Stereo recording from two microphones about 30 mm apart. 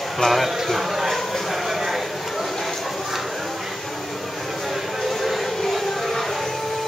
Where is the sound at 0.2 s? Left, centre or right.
Centre.